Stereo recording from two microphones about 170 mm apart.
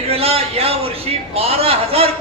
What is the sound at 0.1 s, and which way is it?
A man's voice, 35° right (ahead or behind).